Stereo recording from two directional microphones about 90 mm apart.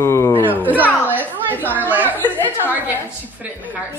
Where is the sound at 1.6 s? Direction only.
20° right (ahead or behind).